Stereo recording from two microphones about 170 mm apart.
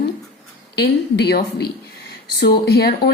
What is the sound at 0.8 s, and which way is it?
Speech, 75° left (ahead or behind).